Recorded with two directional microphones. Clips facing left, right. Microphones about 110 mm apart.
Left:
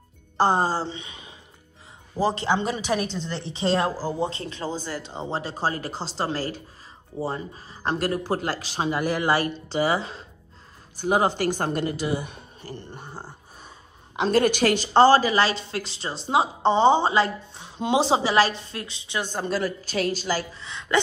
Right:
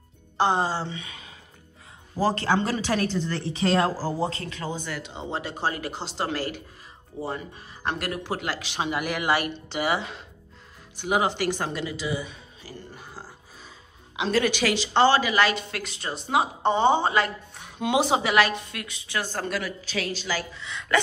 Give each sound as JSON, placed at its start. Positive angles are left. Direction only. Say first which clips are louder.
{"t": 0.4, "sound": "a woman's voice", "louder": "left 2 dB", "side_deg": 40}
{"t": 13.1, "sound": "a woman's voice", "louder": "left 3 dB", "side_deg": 25}
{"t": 14.1, "sound": "a woman's voice", "louder": "left 3 dB", "side_deg": 45}
{"t": 19.5, "sound": "speech", "louder": "left 4 dB", "side_deg": 40}